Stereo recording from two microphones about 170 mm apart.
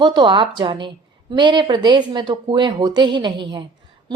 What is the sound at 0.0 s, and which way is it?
A woman's voice, 25° right (ahead or behind).